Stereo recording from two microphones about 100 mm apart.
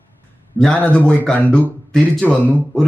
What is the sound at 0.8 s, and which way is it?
A man's voice, 15° left (ahead or behind).